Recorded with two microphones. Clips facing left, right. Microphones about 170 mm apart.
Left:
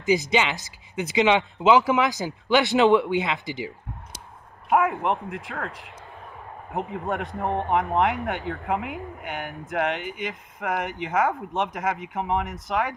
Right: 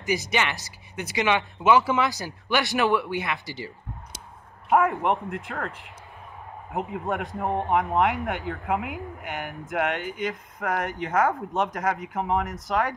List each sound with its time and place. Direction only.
0.1 s speech: 15° left (ahead or behind)
4.6 s speech: centre (ahead or behind)
6.7 s speech: centre (ahead or behind)